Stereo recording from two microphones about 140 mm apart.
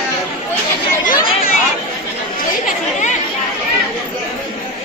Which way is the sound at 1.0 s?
80° left.